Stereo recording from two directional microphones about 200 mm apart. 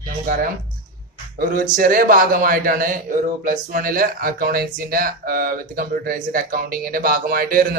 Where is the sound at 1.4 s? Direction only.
45° right (ahead or behind).